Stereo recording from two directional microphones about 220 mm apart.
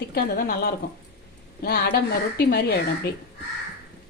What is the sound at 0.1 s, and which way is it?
Speech, 45° left (ahead or behind).